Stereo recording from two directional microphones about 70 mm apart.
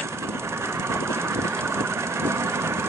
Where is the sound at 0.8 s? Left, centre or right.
Right.